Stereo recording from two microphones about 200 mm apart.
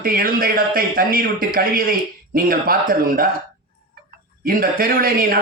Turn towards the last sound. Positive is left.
turn(degrees=-45)  # may be behind; listen again after turning